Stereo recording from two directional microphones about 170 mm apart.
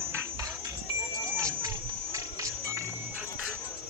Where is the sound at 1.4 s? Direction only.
20° right (ahead or behind).